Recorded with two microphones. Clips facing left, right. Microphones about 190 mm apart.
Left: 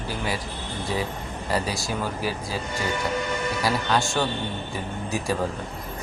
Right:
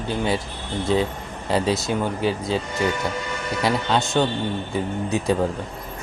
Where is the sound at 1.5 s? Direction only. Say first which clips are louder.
Right 6 dB; 25° right (ahead or behind).